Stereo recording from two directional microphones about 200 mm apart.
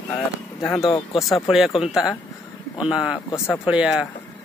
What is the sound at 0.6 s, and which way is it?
Speech, 10° left (ahead or behind).